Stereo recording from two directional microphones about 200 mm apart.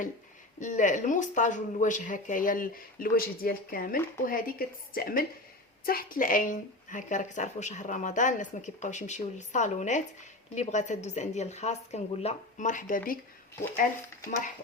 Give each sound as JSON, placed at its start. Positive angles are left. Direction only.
{"t": 0.6, "sound": "speech", "side_deg": 40}